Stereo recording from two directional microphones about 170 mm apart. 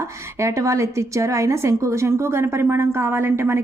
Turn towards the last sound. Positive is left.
turn(degrees=-15)  # may be behind; listen again after turning